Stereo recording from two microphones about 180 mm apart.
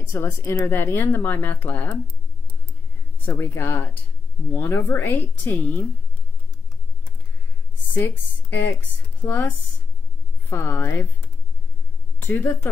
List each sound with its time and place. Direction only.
0.0 s speech: 15° left (ahead or behind)
3.3 s speech: 15° left (ahead or behind)
7.9 s speech: 10° left (ahead or behind)
12.2 s speech: 10° left (ahead or behind)